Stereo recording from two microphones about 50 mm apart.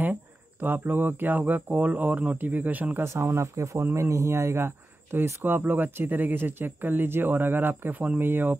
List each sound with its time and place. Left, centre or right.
0.0 s speech: right
3.0 s speech: right
3.8 s speech: right
4.6 s speech: right
5.4 s speech: right